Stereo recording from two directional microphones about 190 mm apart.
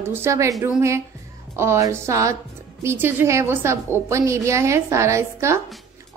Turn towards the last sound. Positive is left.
turn(degrees=-15)  # may be behind; listen again after turning